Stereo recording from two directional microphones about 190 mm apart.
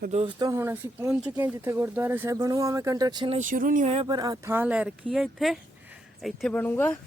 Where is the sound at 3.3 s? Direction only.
45° right (ahead or behind).